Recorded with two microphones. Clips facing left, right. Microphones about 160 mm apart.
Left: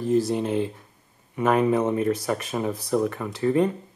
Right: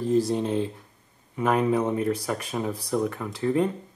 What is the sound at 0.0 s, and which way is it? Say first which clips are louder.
Speech: left 1 dB; 5° left (ahead or behind).